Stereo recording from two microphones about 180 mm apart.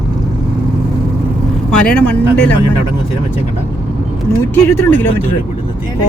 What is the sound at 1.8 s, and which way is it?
Speech, 5° left (ahead or behind).